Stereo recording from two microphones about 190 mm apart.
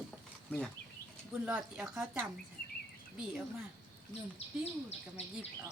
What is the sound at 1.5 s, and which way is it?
Speech, 5° right (ahead or behind).